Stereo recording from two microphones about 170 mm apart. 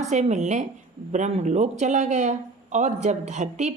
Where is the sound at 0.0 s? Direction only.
45° right (ahead or behind).